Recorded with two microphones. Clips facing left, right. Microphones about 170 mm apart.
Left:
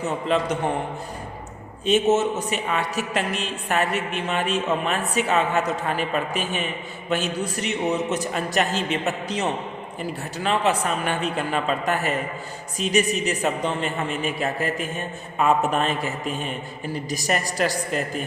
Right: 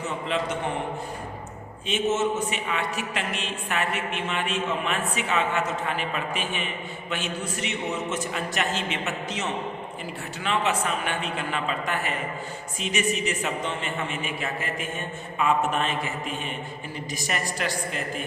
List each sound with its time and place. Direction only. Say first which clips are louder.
0.3 s a man's voice: left 5 dB; 40° left (ahead or behind)
1.9 s a man's voice: left 5 dB; 40° left (ahead or behind)